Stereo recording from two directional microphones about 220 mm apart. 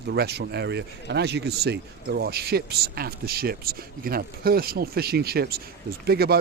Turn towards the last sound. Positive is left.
turn(degrees=-45)  # may be behind; listen again after turning